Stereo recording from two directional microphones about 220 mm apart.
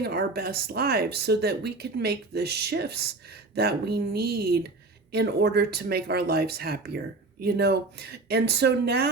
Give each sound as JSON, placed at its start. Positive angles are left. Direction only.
{"t": 0.0, "sound": "speech", "side_deg": -45}